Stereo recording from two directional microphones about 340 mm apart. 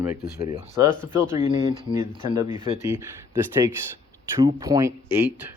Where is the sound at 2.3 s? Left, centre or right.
Centre.